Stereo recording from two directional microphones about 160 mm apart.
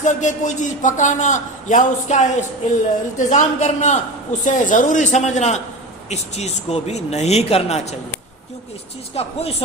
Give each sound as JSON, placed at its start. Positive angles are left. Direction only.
{"t": 0.0, "sound": "a man's voice", "side_deg": 50}
{"t": 9.1, "sound": "speech", "side_deg": 40}